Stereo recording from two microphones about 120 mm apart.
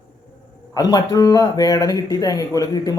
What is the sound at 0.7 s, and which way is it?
Speech, 35° left (ahead or behind).